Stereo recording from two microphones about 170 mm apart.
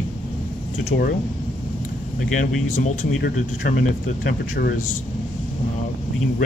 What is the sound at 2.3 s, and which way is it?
Speech, 50° left (ahead or behind).